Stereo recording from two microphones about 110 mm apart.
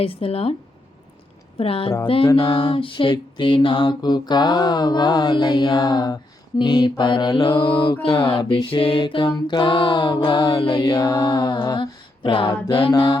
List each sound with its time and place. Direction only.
0.0 s speech: 60° left (ahead or behind)
1.5 s speech: 60° left (ahead or behind)
2.3 s mantra: 45° left (ahead or behind); by 11.3 s 30° left (ahead or behind)
11.3 s mantra: 45° left (ahead or behind)